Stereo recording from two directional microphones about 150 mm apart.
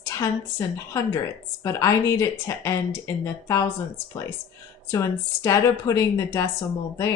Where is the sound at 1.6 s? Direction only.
20° left (ahead or behind).